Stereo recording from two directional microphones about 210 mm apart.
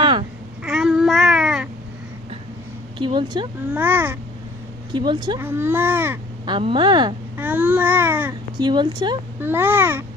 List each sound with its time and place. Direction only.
0.0 s a sound: 25° right (ahead or behind)
0.6 s a sound: 5° right (ahead or behind)
3.0 s a woman's voice: 20° right (ahead or behind)
3.8 s speech: 10° right (ahead or behind)
4.9 s a woman's voice: 20° right (ahead or behind)
5.4 s speech: 10° right (ahead or behind)
6.4 s a woman's voice: 25° right (ahead or behind)
7.3 s babbling: 10° right (ahead or behind)
8.5 s a woman's voice: 20° right (ahead or behind)
9.4 s speech: 10° right (ahead or behind)